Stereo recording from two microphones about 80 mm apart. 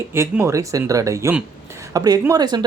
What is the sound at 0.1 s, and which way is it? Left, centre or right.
Speech, right.